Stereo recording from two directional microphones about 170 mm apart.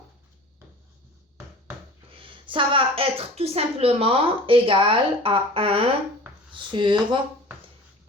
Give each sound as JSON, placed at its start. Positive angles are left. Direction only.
{"t": 2.1, "sound": "a woman's voice", "side_deg": -30}